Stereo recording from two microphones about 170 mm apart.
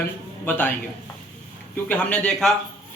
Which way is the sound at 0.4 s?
10° left (ahead or behind).